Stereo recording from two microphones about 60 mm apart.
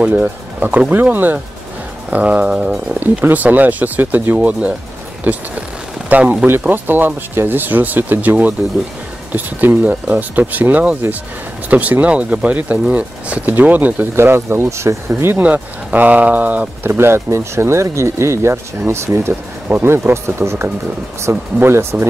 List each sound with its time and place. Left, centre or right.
0.0 s speech: right
3.3 s speech: right
6.0 s speech: right
14.1 s speech: right
15.4 s speech: right
19.1 s speech: right